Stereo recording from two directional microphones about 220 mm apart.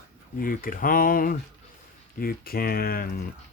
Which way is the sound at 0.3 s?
40° left (ahead or behind).